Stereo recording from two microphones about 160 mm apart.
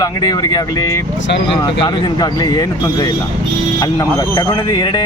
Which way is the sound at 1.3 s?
90° left.